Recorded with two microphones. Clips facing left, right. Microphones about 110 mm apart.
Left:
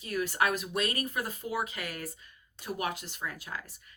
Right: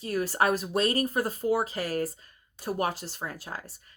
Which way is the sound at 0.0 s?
35° right (ahead or behind).